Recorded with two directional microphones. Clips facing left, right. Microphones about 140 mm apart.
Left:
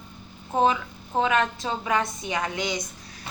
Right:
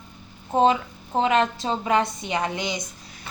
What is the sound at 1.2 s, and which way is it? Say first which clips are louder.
A woman's voice: right 2 dB; 30° right (ahead or behind).